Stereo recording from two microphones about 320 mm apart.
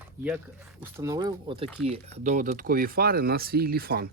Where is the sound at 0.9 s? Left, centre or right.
Centre.